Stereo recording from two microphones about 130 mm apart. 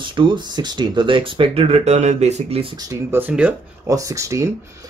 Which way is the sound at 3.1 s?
15° right (ahead or behind).